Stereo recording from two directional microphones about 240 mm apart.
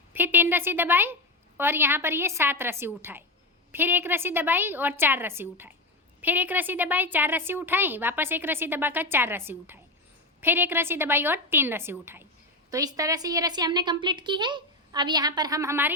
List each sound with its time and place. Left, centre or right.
0.1 s a woman's voice: centre